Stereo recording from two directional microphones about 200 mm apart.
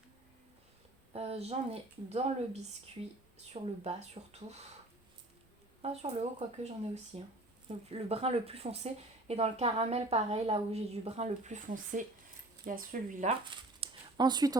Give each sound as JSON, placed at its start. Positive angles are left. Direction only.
{"t": 1.1, "sound": "speech", "side_deg": -30}
{"t": 5.8, "sound": "speech", "side_deg": -30}
{"t": 13.8, "sound": "a sound", "side_deg": -20}